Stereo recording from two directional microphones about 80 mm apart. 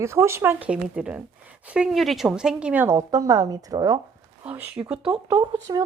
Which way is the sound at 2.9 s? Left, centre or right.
Right.